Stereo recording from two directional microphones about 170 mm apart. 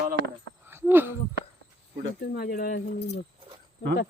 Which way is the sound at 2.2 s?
65° left (ahead or behind).